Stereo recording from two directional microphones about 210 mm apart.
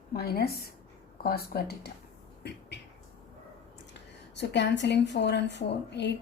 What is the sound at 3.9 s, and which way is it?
A woman's voice, 55° left (ahead or behind).